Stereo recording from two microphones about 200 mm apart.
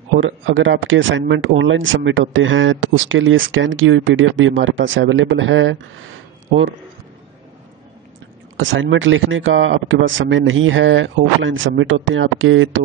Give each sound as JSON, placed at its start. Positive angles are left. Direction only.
{"t": 0.2, "sound": "speech", "side_deg": -70}
{"t": 8.5, "sound": "speech", "side_deg": -70}